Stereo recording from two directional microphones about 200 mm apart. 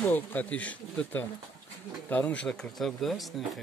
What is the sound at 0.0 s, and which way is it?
Speech, 10° left (ahead or behind).